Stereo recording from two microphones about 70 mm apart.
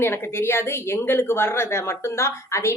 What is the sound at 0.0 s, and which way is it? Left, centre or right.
A woman's voice, left.